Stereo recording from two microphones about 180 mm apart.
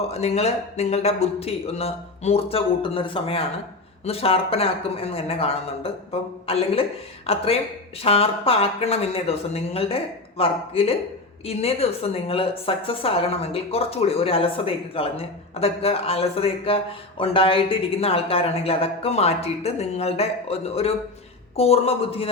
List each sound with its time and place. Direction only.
0.1 s a woman's voice: 35° left (ahead or behind)